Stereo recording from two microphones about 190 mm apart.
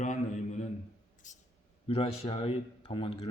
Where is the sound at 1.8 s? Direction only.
30° left (ahead or behind).